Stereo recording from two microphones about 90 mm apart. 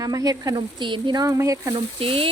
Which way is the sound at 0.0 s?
40° right (ahead or behind).